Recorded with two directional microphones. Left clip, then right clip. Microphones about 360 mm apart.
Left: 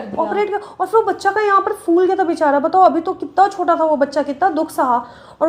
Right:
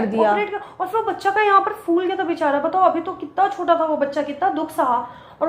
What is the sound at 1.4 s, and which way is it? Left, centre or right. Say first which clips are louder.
A woman's voice: right 2 dB; left.